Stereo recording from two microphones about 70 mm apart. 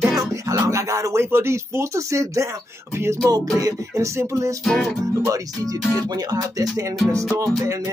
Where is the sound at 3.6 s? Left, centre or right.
Right.